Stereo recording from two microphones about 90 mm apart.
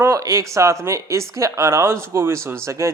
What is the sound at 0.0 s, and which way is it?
Speech, 30° right (ahead or behind).